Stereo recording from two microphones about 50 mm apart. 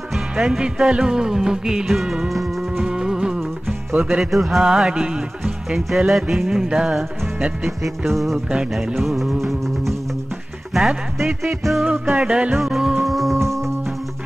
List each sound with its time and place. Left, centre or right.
0.4 s music: centre
2.2 s music: centre
2.8 s music: centre
5.4 s music: centre
7.6 s music: centre
10.7 s music: centre
11.8 s music: right
12.5 s music: centre
13.4 s music: right